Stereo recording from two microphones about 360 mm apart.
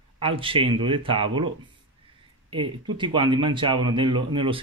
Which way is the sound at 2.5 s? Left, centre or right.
Centre.